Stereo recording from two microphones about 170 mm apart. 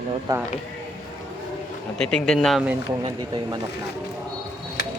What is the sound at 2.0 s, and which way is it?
Speech, 5° left (ahead or behind).